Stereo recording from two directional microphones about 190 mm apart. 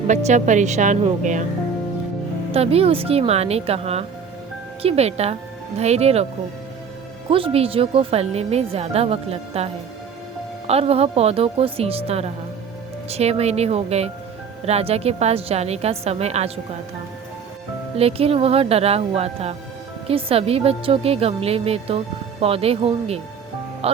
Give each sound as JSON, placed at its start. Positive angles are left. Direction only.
{"t": 0.1, "sound": "a woman's voice", "side_deg": -40}
{"t": 2.5, "sound": "a woman's voice", "side_deg": -30}
{"t": 7.3, "sound": "a woman's voice", "side_deg": -30}
{"t": 10.7, "sound": "a woman's voice", "side_deg": -30}
{"t": 17.9, "sound": "a woman's voice", "side_deg": -30}
{"t": 23.8, "sound": "music", "side_deg": -30}